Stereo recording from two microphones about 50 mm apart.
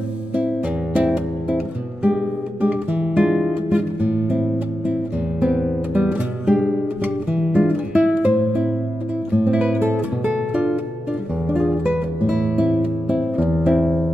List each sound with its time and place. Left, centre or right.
0.9 s music: right
2.0 s guitar: right
4.0 s music: right
5.4 s guitar: centre
5.9 s music: right
13.6 s music: centre